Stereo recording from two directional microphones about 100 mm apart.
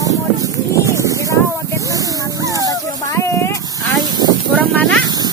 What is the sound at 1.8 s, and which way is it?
Snake, 35° right (ahead or behind).